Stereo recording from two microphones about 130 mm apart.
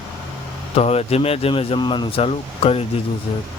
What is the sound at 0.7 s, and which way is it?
Speech, 50° left (ahead or behind).